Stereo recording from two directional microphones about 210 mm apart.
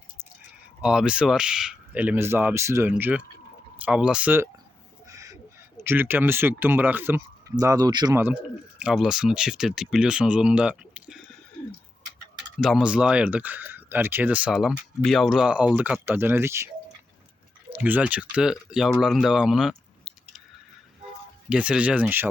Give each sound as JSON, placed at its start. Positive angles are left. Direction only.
{"t": 0.8, "sound": "speech", "side_deg": -5}
{"t": 5.0, "sound": "bird", "side_deg": -15}
{"t": 5.8, "sound": "speech", "side_deg": -10}
{"t": 12.5, "sound": "speech", "side_deg": 0}
{"t": 17.7, "sound": "speech", "side_deg": -10}
{"t": 21.5, "sound": "speech", "side_deg": -5}